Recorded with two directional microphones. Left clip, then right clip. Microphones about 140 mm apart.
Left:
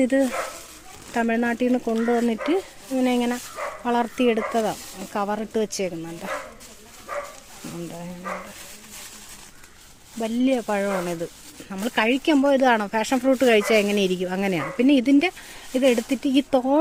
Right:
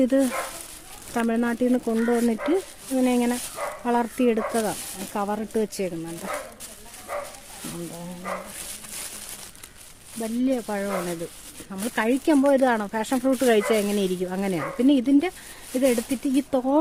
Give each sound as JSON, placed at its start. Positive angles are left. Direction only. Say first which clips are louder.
{"t": 0.0, "sound": "speech", "louder": "left 1 dB", "side_deg": -20}
{"t": 1.1, "sound": "speech", "louder": "left 2 dB", "side_deg": -5}
{"t": 10.2, "sound": "speech", "louder": "left 3 dB", "side_deg": 10}